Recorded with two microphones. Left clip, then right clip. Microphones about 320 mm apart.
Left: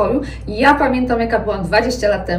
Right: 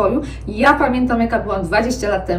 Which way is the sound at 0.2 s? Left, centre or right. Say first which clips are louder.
Left 1 dB; centre.